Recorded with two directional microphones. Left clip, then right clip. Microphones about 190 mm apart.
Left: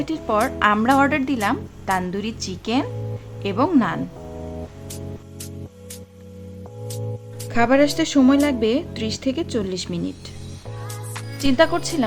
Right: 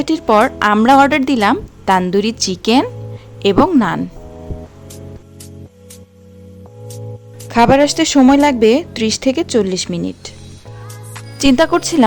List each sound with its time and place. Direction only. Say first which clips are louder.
0.0 s a woman's voice: right 9 dB; 35° right (ahead or behind)
7.5 s a woman's voice: right 7 dB; 35° right (ahead or behind)
11.3 s a woman's voice: right 6 dB; 40° right (ahead or behind)